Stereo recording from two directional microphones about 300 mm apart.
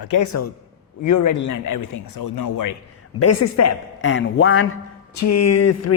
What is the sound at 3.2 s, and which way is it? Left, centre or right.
Speech, left.